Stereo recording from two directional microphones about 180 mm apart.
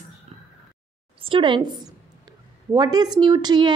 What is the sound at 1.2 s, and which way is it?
Speech, 30° right (ahead or behind).